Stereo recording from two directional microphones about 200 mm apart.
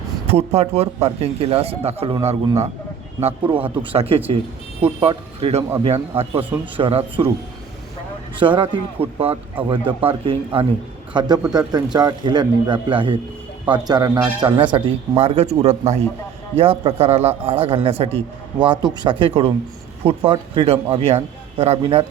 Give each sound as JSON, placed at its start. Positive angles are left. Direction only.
{"t": 0.3, "sound": "speech", "side_deg": -30}
{"t": 8.4, "sound": "speech", "side_deg": -25}